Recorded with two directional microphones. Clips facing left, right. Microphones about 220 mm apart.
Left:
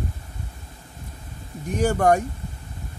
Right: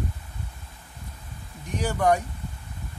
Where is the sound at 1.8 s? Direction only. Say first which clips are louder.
Left 4 dB; 45° left (ahead or behind).